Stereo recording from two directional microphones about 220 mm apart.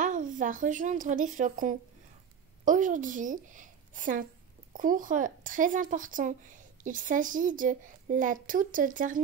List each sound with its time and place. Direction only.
0.0 s a woman's voice: 35° right (ahead or behind)